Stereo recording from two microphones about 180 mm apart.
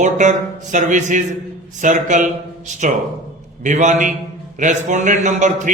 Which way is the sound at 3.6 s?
45° right (ahead or behind).